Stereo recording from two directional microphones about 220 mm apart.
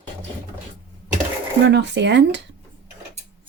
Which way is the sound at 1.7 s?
50° right (ahead or behind).